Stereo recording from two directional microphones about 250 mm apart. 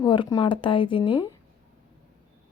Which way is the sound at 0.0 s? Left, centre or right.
Centre.